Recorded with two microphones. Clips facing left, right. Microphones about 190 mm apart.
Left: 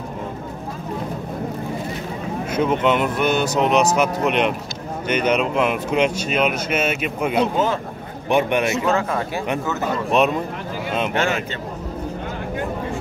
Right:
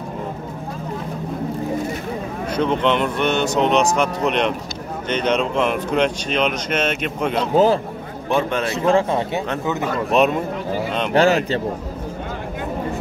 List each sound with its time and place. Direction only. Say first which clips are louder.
2.5 s speech: even; 5° left (ahead or behind)
7.5 s speech: right 6 dB; 35° right (ahead or behind)
8.3 s speech: left 2 dB; 15° left (ahead or behind)
8.7 s speech: right 3 dB; 30° right (ahead or behind)
11.1 s speech: right 6 dB; 35° right (ahead or behind)